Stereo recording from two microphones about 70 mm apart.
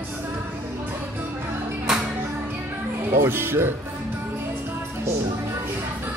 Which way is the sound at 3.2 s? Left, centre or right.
Right.